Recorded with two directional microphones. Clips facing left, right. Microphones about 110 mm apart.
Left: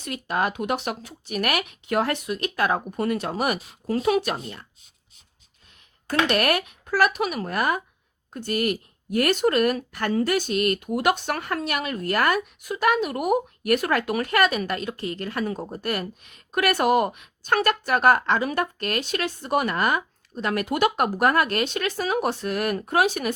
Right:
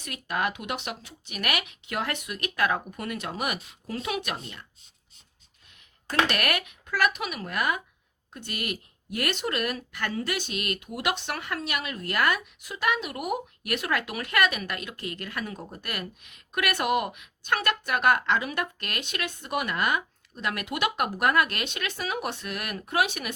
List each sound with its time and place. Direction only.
0.0 s speech: 30° left (ahead or behind)
6.3 s speech: 30° left (ahead or behind)